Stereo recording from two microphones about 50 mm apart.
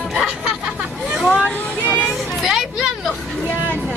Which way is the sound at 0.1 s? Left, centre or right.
Centre.